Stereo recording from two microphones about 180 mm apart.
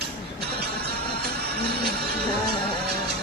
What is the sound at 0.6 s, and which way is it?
Music, 60° right (ahead or behind).